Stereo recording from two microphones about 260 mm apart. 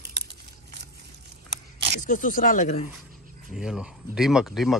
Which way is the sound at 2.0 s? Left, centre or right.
Left.